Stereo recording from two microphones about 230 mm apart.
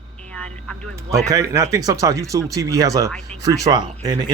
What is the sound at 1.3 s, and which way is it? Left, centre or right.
Speech, centre.